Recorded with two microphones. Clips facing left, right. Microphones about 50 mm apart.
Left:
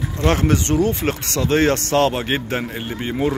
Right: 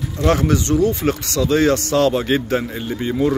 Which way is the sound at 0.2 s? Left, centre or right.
Left.